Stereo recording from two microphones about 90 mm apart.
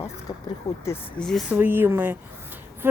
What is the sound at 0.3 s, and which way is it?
Speech, 45° left (ahead or behind).